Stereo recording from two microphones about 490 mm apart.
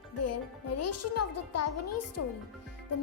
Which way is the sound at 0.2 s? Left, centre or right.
Left.